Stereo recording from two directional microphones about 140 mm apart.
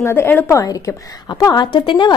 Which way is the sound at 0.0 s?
15° left (ahead or behind).